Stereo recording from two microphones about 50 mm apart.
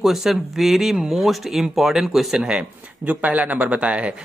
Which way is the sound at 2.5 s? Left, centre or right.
Right.